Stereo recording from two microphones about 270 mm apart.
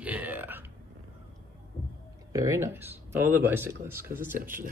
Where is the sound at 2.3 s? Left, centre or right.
Centre.